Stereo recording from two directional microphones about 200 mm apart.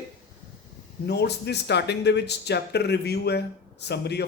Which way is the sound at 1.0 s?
55° left (ahead or behind).